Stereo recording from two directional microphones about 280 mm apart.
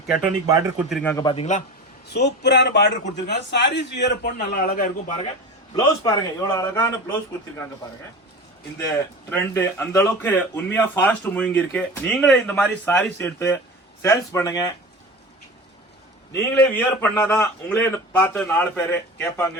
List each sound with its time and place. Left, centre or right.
0.1 s a man's voice: centre; by 1.6 s left
2.0 s a man's voice: left
5.7 s a man's voice: centre
9.3 s a man's voice: centre
16.3 s a man's voice: centre